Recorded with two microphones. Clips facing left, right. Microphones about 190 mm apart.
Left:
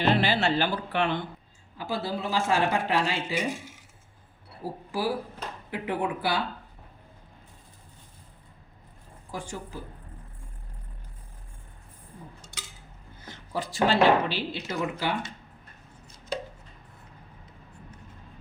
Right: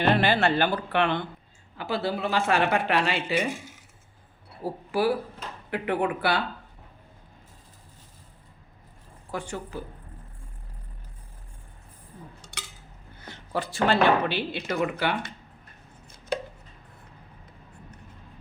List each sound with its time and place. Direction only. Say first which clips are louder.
0.0 s speech: right 2 dB; 55° right (ahead or behind)
4.9 s speech: right 5 dB; 65° right (ahead or behind)
9.3 s speech: right 3 dB; 65° right (ahead or behind)
12.4 s dishes: right 2 dB; 65° right (ahead or behind)
13.2 s speech: right 2 dB; 65° right (ahead or behind)